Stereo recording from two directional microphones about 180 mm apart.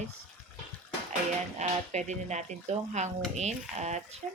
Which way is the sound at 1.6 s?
40° right (ahead or behind).